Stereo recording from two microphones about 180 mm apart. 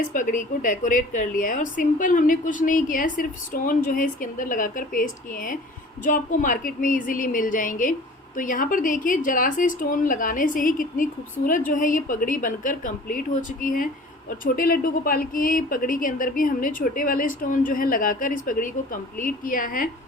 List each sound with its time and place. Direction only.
0.1 s a woman's voice: 45° left (ahead or behind)